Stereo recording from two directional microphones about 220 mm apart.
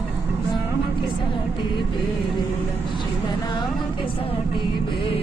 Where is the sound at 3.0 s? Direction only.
20° left (ahead or behind).